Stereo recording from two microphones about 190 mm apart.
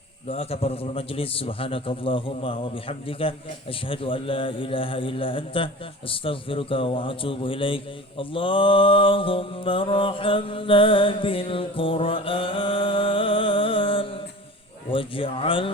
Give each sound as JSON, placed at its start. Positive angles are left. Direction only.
{"t": 0.3, "sound": "a man's voice", "side_deg": 30}